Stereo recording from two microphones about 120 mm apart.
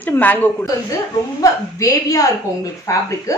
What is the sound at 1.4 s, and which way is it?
A woman's voice, 30° left (ahead or behind).